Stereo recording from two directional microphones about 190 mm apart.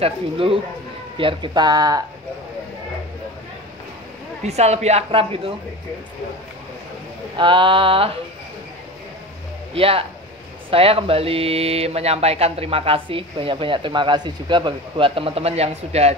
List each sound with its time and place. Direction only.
0.0 s speech: 30° right (ahead or behind)
4.4 s speech: 35° right (ahead or behind)
7.3 s speech: 25° right (ahead or behind)
9.8 s speech: 30° right (ahead or behind)